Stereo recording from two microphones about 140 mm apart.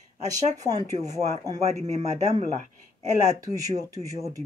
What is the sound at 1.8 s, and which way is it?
Speech, 55° right (ahead or behind).